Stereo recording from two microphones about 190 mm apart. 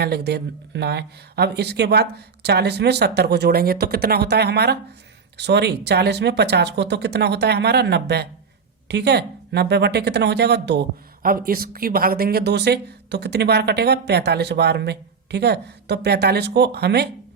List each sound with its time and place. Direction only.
0.0 s speech: 60° right (ahead or behind)